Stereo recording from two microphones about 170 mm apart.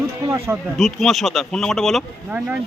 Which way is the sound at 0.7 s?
Centre (ahead or behind).